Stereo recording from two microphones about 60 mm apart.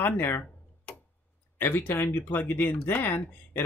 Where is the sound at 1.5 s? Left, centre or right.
Left.